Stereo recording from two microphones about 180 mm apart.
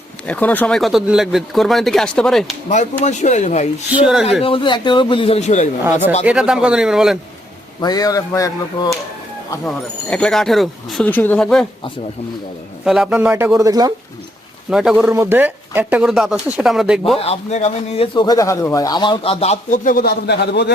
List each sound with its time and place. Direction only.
0.3 s speech: 10° left (ahead or behind)
3.0 s speech: 40° left (ahead or behind)
3.9 s speech: 5° right (ahead or behind)
4.4 s speech: 30° left (ahead or behind)
6.2 s speech: 5° right (ahead or behind)
7.8 s speech: 20° left (ahead or behind)
9.6 s speech: 5° left (ahead or behind)
12.8 s speech: 5° right (ahead or behind); by 13.9 s 20° right (ahead or behind)
14.7 s speech: 5° right (ahead or behind)
15.1 s speech: 15° right (ahead or behind)
17.2 s speech: 35° left (ahead or behind); by 20.7 s 65° left (ahead or behind)